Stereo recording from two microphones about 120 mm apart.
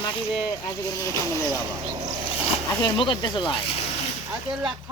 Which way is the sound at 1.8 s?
45° right (ahead or behind).